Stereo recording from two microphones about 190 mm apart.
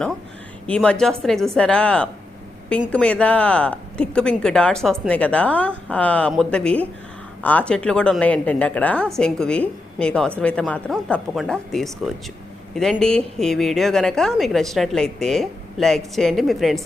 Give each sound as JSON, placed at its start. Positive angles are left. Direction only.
{"t": 0.7, "sound": "a woman's voice", "side_deg": 5}